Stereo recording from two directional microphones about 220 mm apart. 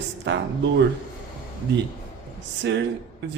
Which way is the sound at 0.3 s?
55° right (ahead or behind).